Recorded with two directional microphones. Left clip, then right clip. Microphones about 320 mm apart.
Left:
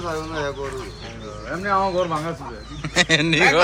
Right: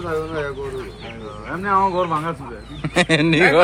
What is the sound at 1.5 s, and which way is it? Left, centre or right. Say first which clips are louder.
Speech: right 3 dB; centre.